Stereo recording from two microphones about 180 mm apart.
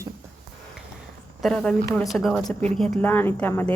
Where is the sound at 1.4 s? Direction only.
5° left (ahead or behind).